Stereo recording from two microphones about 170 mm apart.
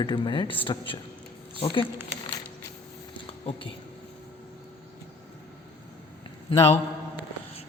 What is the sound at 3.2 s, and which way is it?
Cutlery, 30° left (ahead or behind).